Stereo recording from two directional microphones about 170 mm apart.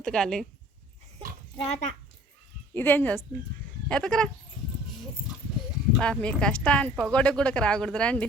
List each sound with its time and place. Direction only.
0.0 s speech: 5° left (ahead or behind)
1.5 s speech: 35° left (ahead or behind)
2.7 s speech: 10° left (ahead or behind)
6.0 s speech: 5° left (ahead or behind)